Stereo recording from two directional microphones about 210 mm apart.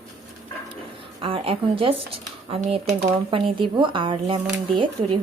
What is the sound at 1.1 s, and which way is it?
Speech, 25° right (ahead or behind).